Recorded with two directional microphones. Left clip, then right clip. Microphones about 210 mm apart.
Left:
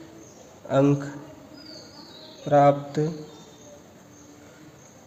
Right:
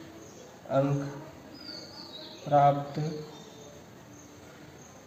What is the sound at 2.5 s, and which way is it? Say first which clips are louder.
Speech: left 5 dB; 50° left (ahead or behind).